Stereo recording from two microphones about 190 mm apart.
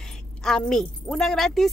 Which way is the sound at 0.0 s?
5° left (ahead or behind).